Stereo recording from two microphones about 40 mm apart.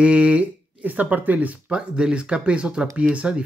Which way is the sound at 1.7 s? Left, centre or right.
Right.